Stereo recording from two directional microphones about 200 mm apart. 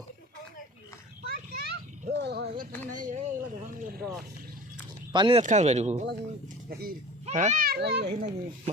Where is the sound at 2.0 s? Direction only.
55° right (ahead or behind).